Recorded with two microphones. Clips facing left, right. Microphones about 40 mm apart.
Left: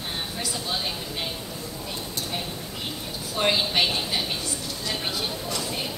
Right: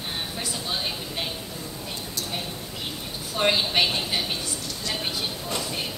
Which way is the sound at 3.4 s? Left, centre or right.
Centre.